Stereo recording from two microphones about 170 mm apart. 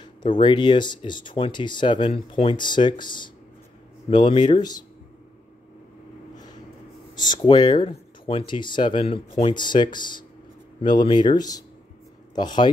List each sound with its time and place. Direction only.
0.0 s speech: 25° left (ahead or behind)
7.2 s speech: 25° left (ahead or behind)